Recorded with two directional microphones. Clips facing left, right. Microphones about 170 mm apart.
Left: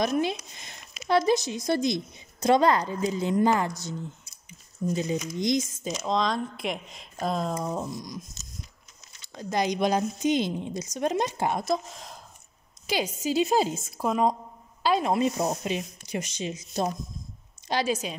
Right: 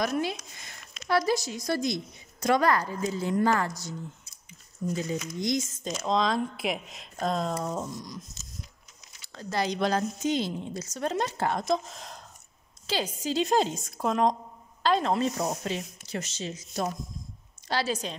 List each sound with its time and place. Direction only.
0.0 s a sound: 20° left (ahead or behind)
1.0 s a woman's voice: 20° left (ahead or behind)
4.9 s a woman's voice: 20° left (ahead or behind)
5.9 s a woman's voice: centre (ahead or behind)
9.3 s a woman's voice: 15° left (ahead or behind)
11.6 s speech: centre (ahead or behind)
12.8 s a woman's voice: 10° left (ahead or behind)